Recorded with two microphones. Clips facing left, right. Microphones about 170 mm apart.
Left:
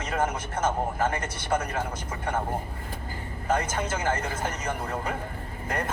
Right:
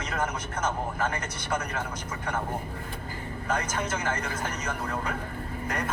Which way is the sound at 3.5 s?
30° left (ahead or behind).